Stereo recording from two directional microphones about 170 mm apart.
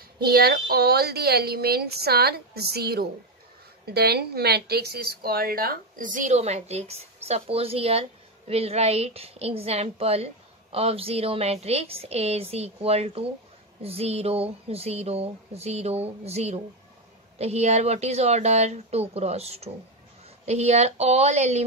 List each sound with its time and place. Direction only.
0.2 s a woman's voice: 65° right (ahead or behind); by 21.6 s 40° right (ahead or behind)